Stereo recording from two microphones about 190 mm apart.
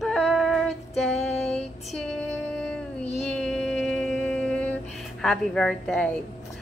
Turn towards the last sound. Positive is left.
turn(degrees=5)  # may be behind; listen again after turning